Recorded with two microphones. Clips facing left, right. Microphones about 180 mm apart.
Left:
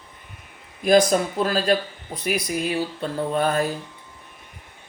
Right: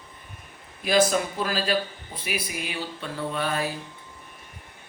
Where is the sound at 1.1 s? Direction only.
40° left (ahead or behind).